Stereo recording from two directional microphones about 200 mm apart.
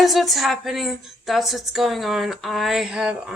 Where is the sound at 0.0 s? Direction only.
Centre (ahead or behind).